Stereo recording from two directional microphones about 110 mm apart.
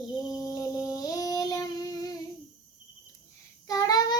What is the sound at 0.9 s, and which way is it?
Child singing, 35° left (ahead or behind).